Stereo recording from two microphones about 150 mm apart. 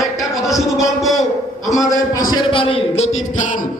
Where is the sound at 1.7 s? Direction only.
20° left (ahead or behind); by 3.0 s 40° left (ahead or behind).